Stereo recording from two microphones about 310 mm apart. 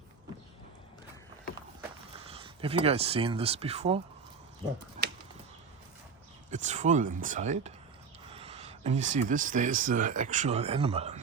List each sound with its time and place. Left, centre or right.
2.1 s speech: centre
6.5 s speech: right